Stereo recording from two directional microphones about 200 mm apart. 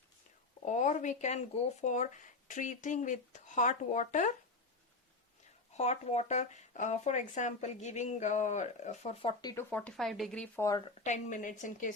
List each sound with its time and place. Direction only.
0.6 s speech: 40° left (ahead or behind)
5.7 s speech: 35° left (ahead or behind)
9.6 s speech: 5° left (ahead or behind)
11.0 s speech: 35° left (ahead or behind)